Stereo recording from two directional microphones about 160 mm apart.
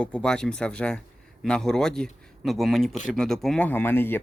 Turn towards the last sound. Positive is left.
turn(degrees=15)  # may be behind; listen again after turning